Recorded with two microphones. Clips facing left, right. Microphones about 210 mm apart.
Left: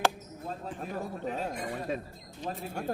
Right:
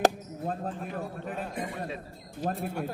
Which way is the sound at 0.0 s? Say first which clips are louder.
Right 5 dB; 50° right (ahead or behind).